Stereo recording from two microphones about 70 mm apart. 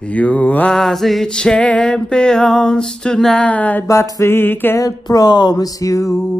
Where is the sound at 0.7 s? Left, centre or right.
Centre; by 3.9 s left.